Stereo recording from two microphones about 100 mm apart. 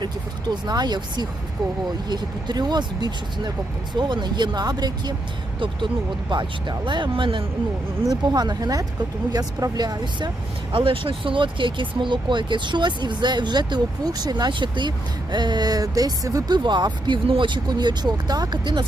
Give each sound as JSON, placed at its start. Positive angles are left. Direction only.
{"t": 0.0, "sound": "speech", "side_deg": -45}
{"t": 6.3, "sound": "speech", "side_deg": -50}
{"t": 8.0, "sound": "speech", "side_deg": -40}
{"t": 10.7, "sound": "speech", "side_deg": -60}